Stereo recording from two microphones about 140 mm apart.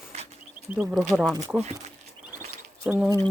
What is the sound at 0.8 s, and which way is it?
Speech, 5° right (ahead or behind).